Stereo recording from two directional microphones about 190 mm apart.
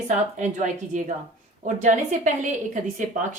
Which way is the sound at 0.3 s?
40° right (ahead or behind).